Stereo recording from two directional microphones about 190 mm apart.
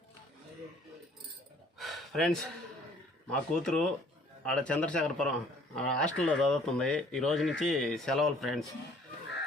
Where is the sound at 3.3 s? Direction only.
5° left (ahead or behind).